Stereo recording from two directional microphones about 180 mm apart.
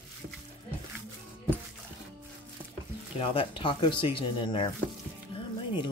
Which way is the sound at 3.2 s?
30° left (ahead or behind).